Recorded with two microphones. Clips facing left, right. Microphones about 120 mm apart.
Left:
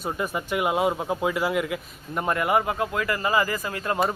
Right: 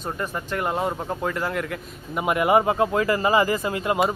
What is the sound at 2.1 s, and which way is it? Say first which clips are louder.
Speech: right 4 dB; 15° right (ahead or behind).